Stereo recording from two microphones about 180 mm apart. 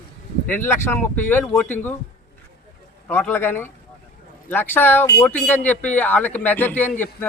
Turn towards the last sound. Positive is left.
turn(degrees=10)  # may be behind; listen again after turning